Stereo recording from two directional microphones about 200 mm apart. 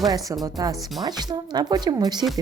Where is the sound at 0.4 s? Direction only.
15° right (ahead or behind).